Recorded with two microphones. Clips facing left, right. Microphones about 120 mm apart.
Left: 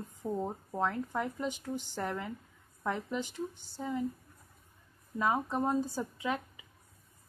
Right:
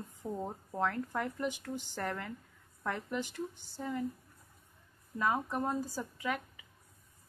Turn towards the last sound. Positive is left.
turn(degrees=25)  # may be behind; listen again after turning